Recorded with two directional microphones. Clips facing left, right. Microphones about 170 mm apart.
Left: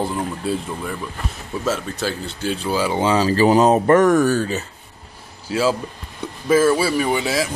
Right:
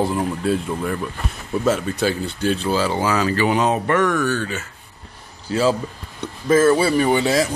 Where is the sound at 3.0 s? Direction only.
30° left (ahead or behind).